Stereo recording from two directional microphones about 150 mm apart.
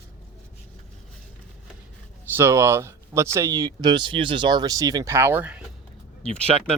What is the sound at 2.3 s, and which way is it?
Speech, 15° right (ahead or behind).